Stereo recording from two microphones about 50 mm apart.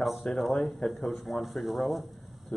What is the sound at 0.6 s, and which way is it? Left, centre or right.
Speech, centre.